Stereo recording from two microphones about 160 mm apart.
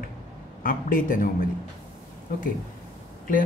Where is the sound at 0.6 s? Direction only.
60° left (ahead or behind).